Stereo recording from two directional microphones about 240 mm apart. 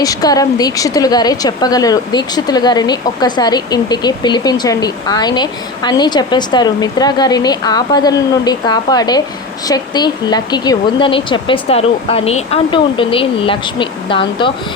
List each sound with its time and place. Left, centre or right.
0.0 s a woman's voice: centre